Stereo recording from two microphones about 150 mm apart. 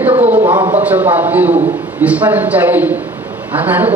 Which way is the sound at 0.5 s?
30° right (ahead or behind).